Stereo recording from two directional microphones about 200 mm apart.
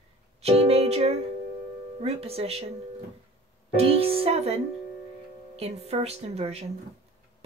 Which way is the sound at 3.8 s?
30° right (ahead or behind).